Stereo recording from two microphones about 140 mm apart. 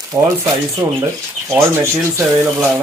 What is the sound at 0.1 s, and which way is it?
Speech, 25° right (ahead or behind).